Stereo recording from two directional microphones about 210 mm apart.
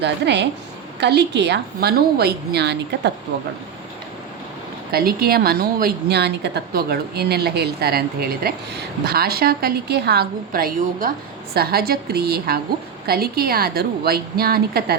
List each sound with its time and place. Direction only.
0.0 s a woman's voice: 55° right (ahead or behind)
4.9 s a woman's voice: 45° right (ahead or behind)